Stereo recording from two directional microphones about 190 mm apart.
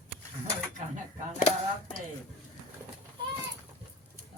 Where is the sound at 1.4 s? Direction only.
35° left (ahead or behind).